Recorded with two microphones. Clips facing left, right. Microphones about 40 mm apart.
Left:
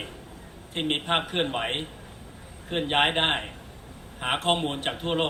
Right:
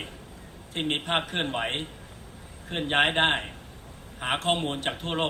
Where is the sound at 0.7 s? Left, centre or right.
Centre.